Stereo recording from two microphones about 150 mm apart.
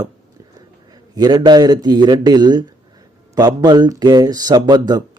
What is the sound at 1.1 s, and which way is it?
Speech, 25° right (ahead or behind).